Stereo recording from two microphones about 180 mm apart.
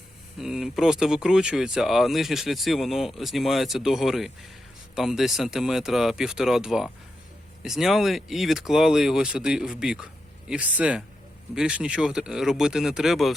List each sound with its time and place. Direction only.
0.3 s speech: centre (ahead or behind)